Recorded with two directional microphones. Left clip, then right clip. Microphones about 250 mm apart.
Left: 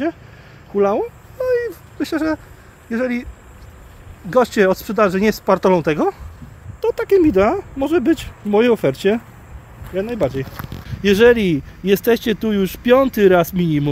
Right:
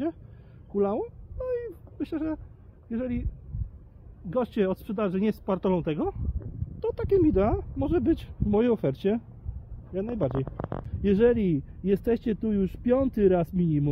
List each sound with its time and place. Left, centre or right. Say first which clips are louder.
0.7 s a sound: left 11 dB; centre
2.9 s speech: left 12 dB; centre
4.3 s speech: left 13 dB; centre
6.8 s speech: left 10 dB; centre